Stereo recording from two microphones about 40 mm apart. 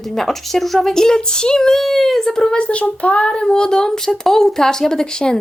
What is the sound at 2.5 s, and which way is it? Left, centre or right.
Speech, left.